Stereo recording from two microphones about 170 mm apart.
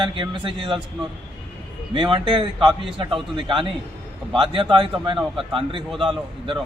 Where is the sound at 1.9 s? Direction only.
30° right (ahead or behind).